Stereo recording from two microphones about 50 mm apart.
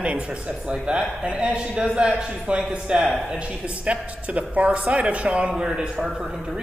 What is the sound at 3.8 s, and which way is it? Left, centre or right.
Speech, right.